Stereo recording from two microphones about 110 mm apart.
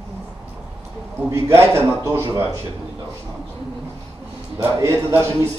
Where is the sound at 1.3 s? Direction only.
25° right (ahead or behind).